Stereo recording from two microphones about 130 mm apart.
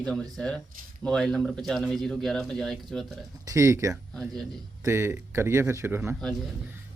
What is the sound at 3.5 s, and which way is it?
Speech, 20° right (ahead or behind).